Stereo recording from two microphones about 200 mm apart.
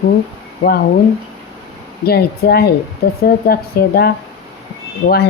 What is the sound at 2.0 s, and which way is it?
Speech, 55° left (ahead or behind).